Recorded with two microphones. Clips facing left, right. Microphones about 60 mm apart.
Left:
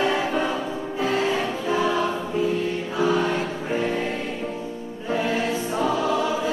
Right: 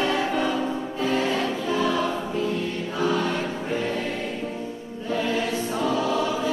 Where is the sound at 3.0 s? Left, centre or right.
Centre.